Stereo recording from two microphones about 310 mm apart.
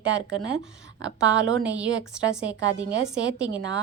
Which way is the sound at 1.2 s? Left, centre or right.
Right.